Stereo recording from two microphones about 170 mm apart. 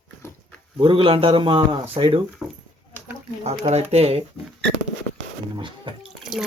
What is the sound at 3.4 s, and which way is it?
Speech, 40° right (ahead or behind).